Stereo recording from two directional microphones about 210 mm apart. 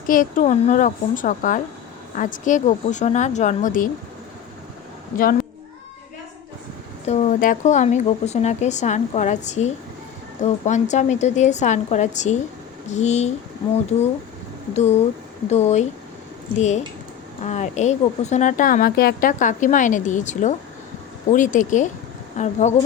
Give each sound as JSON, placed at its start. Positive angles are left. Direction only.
{"t": 0.1, "sound": "speech", "side_deg": 40}
{"t": 5.1, "sound": "a child's voice", "side_deg": 40}
{"t": 7.0, "sound": "speech", "side_deg": 30}
{"t": 14.7, "sound": "speech", "side_deg": 30}